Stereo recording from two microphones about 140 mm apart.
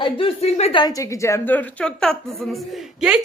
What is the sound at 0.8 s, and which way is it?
A woman's voice, 25° left (ahead or behind).